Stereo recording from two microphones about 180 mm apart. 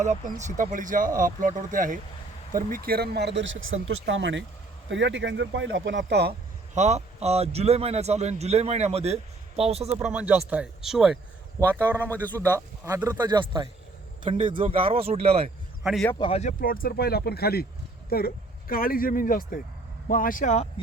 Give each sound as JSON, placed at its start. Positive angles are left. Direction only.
{"t": 0.0, "sound": "speech", "side_deg": -40}
{"t": 6.7, "sound": "a man's voice", "side_deg": -40}
{"t": 10.0, "sound": "speech", "side_deg": -10}
{"t": 12.1, "sound": "a man's voice", "side_deg": 10}
{"t": 12.5, "sound": "a man's voice", "side_deg": -15}
{"t": 15.8, "sound": "speech", "side_deg": 0}
{"t": 16.1, "sound": "speech", "side_deg": 25}
{"t": 16.4, "sound": "speech", "side_deg": 45}